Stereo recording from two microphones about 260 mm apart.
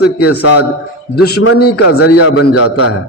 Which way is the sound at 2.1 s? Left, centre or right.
Left.